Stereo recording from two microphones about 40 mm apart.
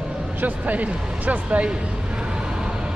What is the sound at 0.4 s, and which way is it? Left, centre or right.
Speech, right.